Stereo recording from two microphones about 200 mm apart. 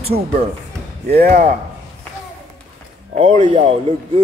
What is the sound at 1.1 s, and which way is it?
Speech, 45° right (ahead or behind).